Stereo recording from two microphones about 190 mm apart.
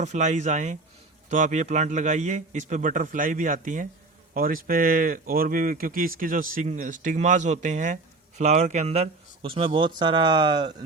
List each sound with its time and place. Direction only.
0.0 s a man's voice: 40° right (ahead or behind); by 10.8 s 20° right (ahead or behind)